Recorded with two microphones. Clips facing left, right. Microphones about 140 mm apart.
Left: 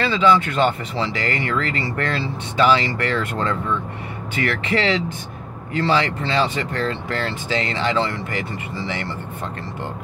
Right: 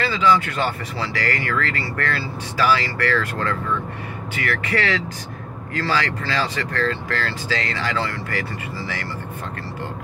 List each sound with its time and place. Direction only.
0.0 s speech: 30° left (ahead or behind)